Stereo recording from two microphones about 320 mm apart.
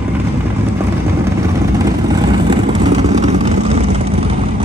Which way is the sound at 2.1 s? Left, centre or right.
Centre.